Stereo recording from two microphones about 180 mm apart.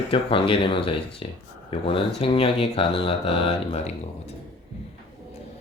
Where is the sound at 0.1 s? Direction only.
30° left (ahead or behind).